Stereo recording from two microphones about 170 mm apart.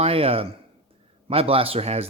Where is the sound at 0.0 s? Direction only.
35° right (ahead or behind).